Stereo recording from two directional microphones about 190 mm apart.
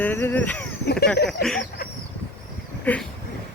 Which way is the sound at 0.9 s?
60° left (ahead or behind).